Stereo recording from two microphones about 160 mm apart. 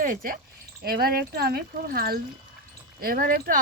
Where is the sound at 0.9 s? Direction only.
70° right (ahead or behind).